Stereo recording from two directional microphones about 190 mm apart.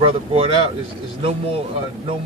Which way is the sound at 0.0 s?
30° right (ahead or behind).